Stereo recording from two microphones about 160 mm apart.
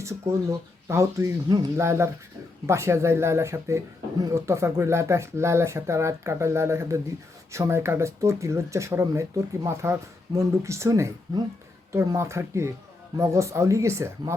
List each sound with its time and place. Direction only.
0.0 s speech: 20° right (ahead or behind)